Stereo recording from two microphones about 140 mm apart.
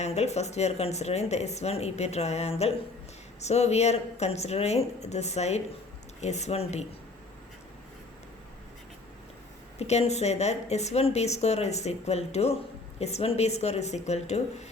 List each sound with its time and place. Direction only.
0.0 s speech: 50° left (ahead or behind)
9.7 s speech: 50° left (ahead or behind)